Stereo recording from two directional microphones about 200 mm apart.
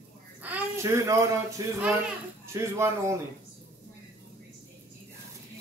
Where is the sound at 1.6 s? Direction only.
15° right (ahead or behind).